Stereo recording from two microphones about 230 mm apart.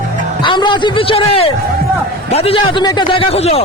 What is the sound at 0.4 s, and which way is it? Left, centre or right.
A man's voice, left.